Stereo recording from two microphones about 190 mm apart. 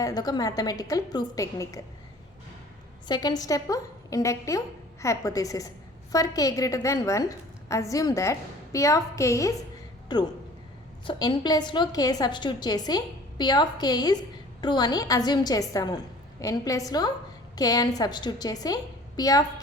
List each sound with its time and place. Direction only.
0.0 s a woman's voice: 20° left (ahead or behind)
3.1 s a woman's voice: 20° left (ahead or behind)